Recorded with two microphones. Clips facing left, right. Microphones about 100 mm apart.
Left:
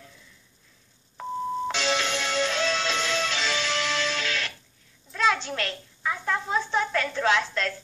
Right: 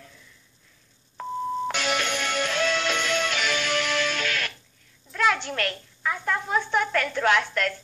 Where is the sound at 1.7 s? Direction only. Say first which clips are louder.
Even; 25° left (ahead or behind).